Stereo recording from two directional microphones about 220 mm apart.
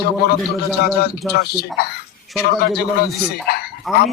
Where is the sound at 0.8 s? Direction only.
45° left (ahead or behind).